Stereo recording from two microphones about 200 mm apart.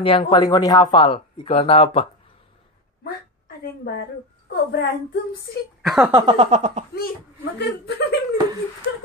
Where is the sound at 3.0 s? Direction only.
50° left (ahead or behind).